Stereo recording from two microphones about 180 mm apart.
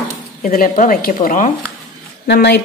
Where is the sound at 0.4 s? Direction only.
50° left (ahead or behind).